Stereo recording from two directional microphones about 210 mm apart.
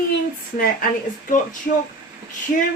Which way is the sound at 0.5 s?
45° left (ahead or behind).